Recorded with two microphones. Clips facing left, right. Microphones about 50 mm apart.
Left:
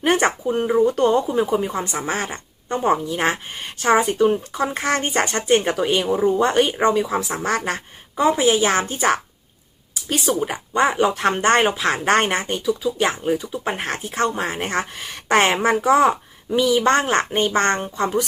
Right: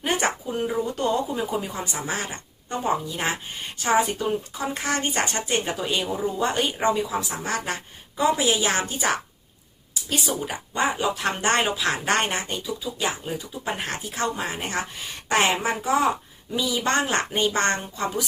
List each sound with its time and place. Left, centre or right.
0.0 s a woman's voice: left
9.9 s a woman's voice: left
12.5 s speech: left